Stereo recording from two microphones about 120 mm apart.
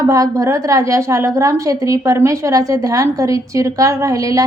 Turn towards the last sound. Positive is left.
turn(degrees=-30)  # may be behind; listen again after turning